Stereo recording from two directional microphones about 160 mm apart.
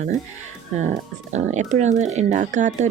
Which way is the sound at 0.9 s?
45° right (ahead or behind).